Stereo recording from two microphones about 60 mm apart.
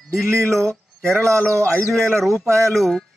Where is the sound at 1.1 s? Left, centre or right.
Right.